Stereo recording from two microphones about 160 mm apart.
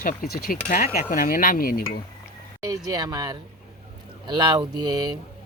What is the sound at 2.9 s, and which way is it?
Speech, 25° right (ahead or behind).